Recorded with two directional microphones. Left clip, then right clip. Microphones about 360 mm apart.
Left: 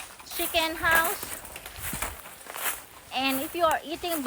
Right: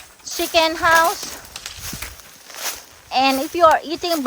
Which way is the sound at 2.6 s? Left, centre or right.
Centre.